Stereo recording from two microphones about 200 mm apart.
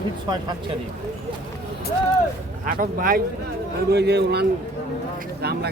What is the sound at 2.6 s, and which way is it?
A man's voice, 45° right (ahead or behind).